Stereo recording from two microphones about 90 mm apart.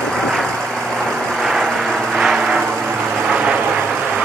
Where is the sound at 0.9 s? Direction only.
5° right (ahead or behind).